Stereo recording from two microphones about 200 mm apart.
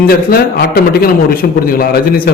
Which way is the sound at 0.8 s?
45° left (ahead or behind).